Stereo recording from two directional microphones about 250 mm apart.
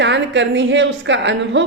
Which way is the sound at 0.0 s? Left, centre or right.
Right.